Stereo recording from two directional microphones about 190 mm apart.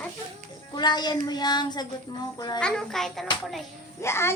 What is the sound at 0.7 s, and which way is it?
Child singing, 25° left (ahead or behind).